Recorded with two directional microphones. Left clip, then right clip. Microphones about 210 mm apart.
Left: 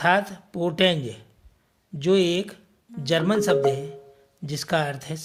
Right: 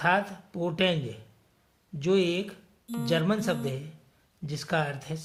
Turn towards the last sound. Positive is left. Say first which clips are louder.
# left 5 dB
turn(degrees=40)  # may be behind; listen again after turning